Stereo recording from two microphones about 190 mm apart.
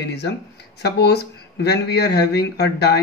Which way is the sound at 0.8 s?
60° left (ahead or behind).